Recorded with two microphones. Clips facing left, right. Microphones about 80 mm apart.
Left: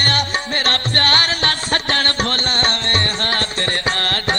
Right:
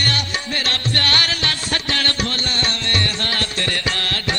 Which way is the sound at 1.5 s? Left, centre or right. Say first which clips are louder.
Left 4 dB; left.